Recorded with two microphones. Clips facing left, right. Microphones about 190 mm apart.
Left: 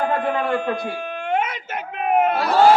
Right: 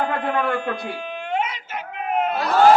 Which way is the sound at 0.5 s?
50° left (ahead or behind).